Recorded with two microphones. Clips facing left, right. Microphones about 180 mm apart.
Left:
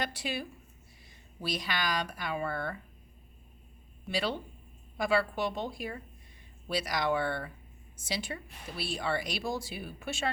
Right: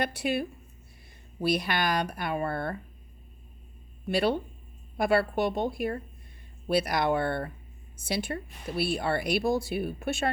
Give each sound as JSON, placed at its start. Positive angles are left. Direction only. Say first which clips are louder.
{"t": 0.0, "sound": "speech", "louder": "right 7 dB", "side_deg": -60}
{"t": 4.1, "sound": "speech", "louder": "right 7 dB", "side_deg": -55}